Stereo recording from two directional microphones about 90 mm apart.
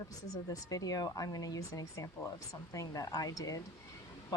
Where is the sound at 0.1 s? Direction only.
40° left (ahead or behind).